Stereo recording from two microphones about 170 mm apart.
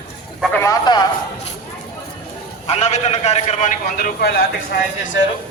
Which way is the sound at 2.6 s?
40° left (ahead or behind).